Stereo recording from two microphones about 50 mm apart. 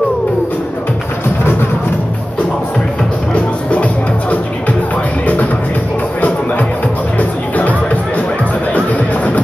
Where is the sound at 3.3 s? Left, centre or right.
Left.